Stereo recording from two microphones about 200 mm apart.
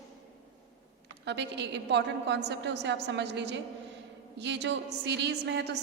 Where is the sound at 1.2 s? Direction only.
60° right (ahead or behind).